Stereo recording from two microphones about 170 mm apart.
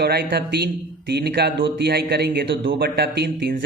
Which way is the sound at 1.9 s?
65° right (ahead or behind).